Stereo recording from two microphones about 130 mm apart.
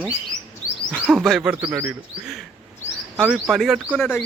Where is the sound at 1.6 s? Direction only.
20° right (ahead or behind).